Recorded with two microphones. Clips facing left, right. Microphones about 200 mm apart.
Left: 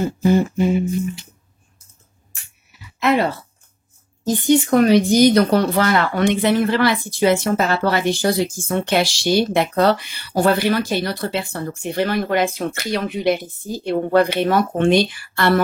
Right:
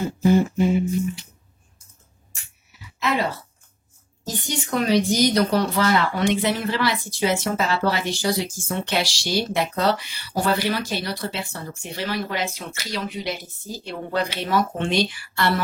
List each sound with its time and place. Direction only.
3.0 s speech: 60° left (ahead or behind)
4.5 s speech: 55° left (ahead or behind)